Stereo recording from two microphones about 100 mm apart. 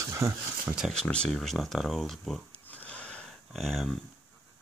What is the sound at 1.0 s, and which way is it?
Speech, 10° left (ahead or behind).